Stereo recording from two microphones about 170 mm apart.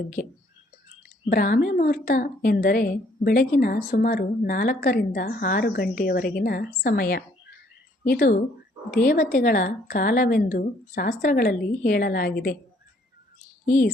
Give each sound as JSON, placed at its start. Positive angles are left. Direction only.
{"t": 0.2, "sound": "a woman's voice", "side_deg": 55}
{"t": 13.7, "sound": "a woman's voice", "side_deg": 50}